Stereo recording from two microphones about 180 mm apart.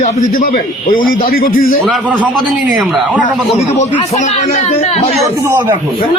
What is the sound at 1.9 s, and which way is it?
Speech, 5° right (ahead or behind).